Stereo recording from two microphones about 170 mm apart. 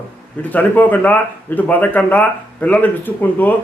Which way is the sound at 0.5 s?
10° left (ahead or behind).